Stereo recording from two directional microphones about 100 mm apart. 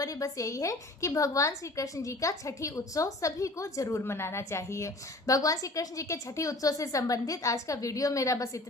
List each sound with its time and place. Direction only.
0.0 s a woman's voice: 35° left (ahead or behind)